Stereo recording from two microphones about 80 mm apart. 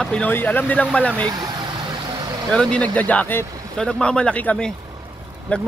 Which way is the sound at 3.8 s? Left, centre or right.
Centre.